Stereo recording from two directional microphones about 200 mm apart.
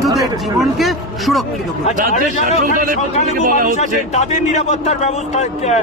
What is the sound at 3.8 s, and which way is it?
A man's voice, 35° left (ahead or behind).